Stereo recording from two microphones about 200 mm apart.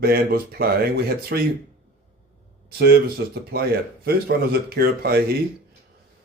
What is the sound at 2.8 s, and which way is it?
Speech, 50° right (ahead or behind).